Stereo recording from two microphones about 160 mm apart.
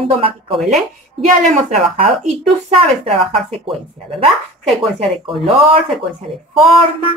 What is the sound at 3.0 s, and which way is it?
Speech, 35° right (ahead or behind).